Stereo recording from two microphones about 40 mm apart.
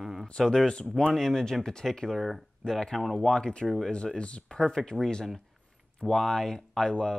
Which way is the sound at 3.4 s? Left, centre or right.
Left.